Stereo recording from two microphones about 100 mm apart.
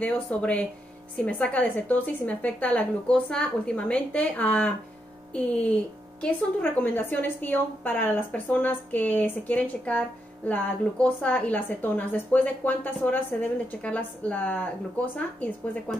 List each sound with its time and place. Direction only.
0.0 s a woman's voice: 15° left (ahead or behind)